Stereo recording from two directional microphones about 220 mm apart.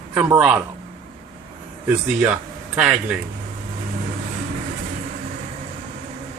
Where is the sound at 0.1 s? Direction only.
5° right (ahead or behind).